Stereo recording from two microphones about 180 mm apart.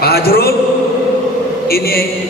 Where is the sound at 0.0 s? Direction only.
60° left (ahead or behind).